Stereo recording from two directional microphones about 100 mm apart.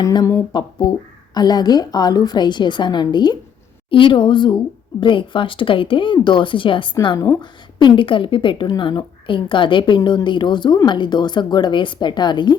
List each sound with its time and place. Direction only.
0.0 s a woman's voice: 40° left (ahead or behind)